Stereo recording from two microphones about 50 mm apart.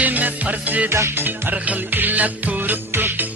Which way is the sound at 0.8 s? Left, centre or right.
Right.